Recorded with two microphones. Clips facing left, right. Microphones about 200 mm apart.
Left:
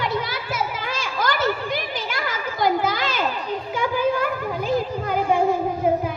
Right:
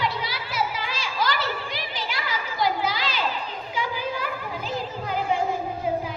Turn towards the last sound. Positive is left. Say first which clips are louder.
# left 5 dB
turn(degrees=55)  # may be behind; listen again after turning